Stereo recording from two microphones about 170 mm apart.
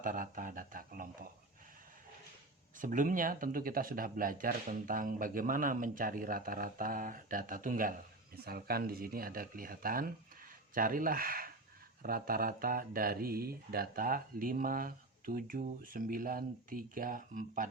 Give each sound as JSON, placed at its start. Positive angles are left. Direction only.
{"t": 0.0, "sound": "speech", "side_deg": -50}
{"t": 2.7, "sound": "speech", "side_deg": -50}
{"t": 8.4, "sound": "speech", "side_deg": -65}